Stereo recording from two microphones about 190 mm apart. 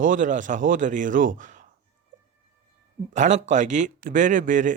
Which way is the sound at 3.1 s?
40° right (ahead or behind).